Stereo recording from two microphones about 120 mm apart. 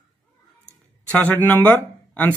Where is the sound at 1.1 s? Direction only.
10° left (ahead or behind).